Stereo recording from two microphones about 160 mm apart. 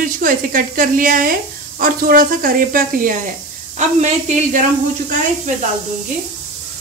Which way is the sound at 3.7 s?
50° right (ahead or behind).